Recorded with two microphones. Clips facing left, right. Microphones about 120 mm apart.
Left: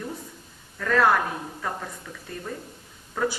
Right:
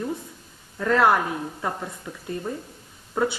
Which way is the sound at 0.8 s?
20° right (ahead or behind).